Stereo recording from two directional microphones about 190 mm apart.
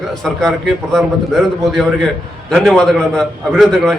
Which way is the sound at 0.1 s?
Centre (ahead or behind).